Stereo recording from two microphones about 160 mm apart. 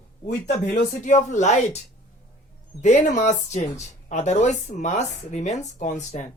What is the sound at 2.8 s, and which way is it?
Speech, 50° left (ahead or behind).